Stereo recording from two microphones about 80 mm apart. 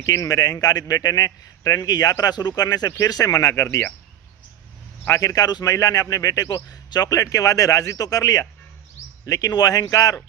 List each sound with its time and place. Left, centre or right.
0.0 s a man's voice: left
3.5 s speech: left
5.1 s speech: left